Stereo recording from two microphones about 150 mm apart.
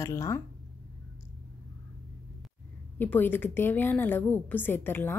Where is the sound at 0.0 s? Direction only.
20° left (ahead or behind).